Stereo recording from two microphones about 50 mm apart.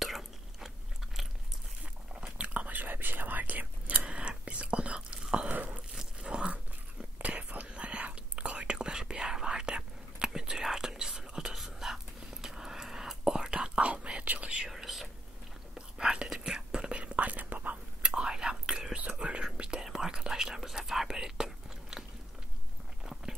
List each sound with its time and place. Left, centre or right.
0.0 s chewing: centre
2.1 s whispering: centre
5.5 s biting: right
5.9 s biting: centre
7.2 s whispering: right
14.2 s whispering: right
14.7 s whispering: centre; by 17.7 s right
18.0 s whispering: centre